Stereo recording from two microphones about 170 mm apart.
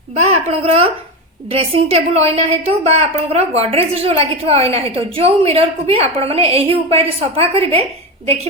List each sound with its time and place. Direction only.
0.1 s a woman's voice: 40° right (ahead or behind)